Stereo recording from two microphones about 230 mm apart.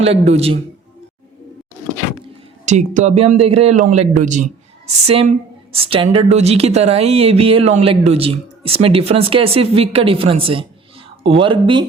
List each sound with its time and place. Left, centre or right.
0.0 s speech: right
2.2 s speech: right